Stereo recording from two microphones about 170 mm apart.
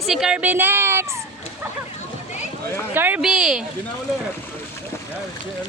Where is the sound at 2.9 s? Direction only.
10° right (ahead or behind).